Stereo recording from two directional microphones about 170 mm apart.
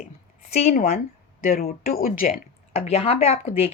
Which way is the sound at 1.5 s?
55° left (ahead or behind).